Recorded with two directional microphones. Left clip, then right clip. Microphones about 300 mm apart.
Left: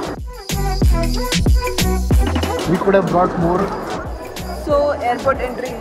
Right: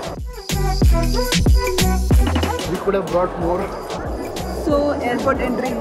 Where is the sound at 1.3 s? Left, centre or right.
Centre.